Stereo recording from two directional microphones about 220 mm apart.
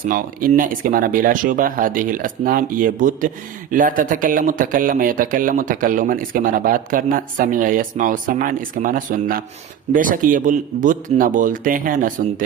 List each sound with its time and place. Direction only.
0.1 s speech: 40° right (ahead or behind)